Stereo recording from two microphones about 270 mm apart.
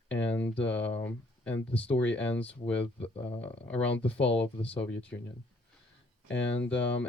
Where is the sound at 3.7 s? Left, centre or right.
Centre.